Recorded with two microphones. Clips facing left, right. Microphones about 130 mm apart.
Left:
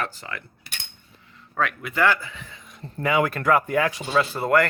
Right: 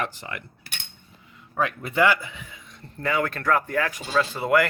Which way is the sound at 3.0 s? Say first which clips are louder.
Left 3 dB; 10° left (ahead or behind).